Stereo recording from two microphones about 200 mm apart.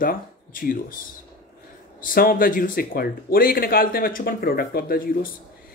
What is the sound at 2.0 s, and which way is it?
Speech, 45° left (ahead or behind).